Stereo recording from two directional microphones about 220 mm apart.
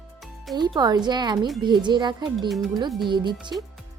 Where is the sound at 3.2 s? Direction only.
20° right (ahead or behind).